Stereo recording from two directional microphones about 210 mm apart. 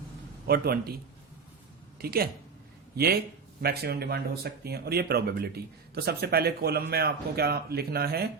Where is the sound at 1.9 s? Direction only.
45° right (ahead or behind).